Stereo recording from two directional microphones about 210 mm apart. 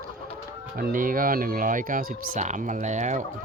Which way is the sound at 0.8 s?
40° right (ahead or behind).